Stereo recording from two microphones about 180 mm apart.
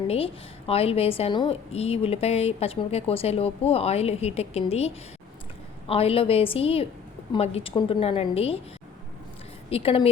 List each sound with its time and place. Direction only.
0.7 s a woman's voice: 35° left (ahead or behind)
5.9 s a woman's voice: 30° left (ahead or behind)
9.6 s a woman's voice: 30° left (ahead or behind)